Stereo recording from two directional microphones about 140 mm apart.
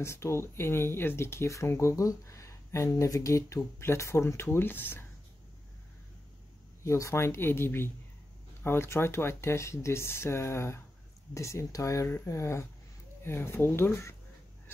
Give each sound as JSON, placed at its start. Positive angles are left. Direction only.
{"t": 0.0, "sound": "speech", "side_deg": 20}
{"t": 6.8, "sound": "speech", "side_deg": 20}